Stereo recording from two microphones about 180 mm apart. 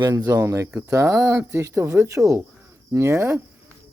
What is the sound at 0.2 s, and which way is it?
Speech, 15° right (ahead or behind).